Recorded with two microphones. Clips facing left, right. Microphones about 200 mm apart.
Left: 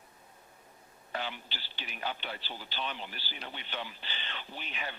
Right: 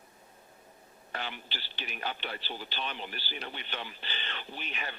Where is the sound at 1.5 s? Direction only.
65° right (ahead or behind).